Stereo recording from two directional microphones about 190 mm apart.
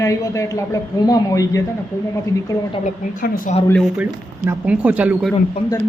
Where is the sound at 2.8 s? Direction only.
50° left (ahead or behind).